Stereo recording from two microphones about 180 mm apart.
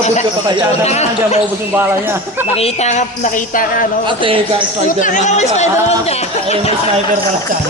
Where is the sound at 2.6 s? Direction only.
35° left (ahead or behind).